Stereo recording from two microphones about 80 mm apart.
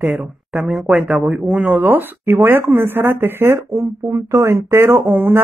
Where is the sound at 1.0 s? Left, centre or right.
Centre.